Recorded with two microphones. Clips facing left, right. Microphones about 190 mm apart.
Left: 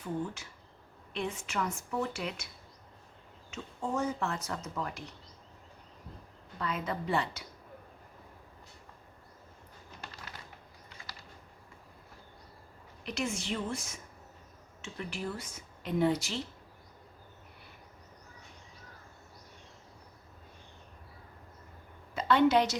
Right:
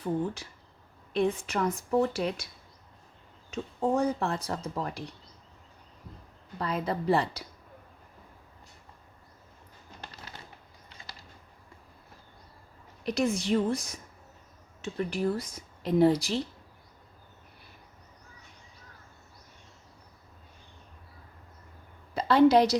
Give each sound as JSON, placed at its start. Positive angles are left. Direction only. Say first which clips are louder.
{"t": 1.1, "sound": "speech", "louder": "right 8 dB", "side_deg": -35}
{"t": 3.5, "sound": "speech", "louder": "right 7 dB", "side_deg": -35}
{"t": 6.6, "sound": "speech", "louder": "right 4 dB", "side_deg": -35}
{"t": 13.1, "sound": "speech", "louder": "right 8 dB", "side_deg": -35}
{"t": 22.1, "sound": "a woman's voice", "louder": "right 5 dB", "side_deg": -35}